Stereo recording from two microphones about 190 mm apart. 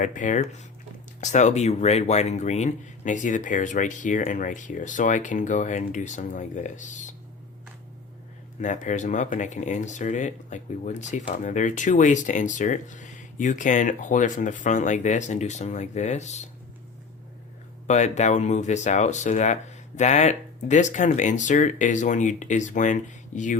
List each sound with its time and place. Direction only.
0.0 s speech: 45° left (ahead or behind)
8.6 s speech: 40° left (ahead or behind)
17.8 s speech: 40° left (ahead or behind)